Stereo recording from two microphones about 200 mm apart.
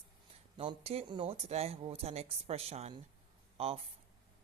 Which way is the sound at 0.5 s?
25° right (ahead or behind).